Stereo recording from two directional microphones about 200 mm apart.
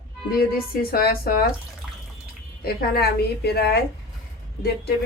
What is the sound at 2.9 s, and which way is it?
Speech, 50° left (ahead or behind).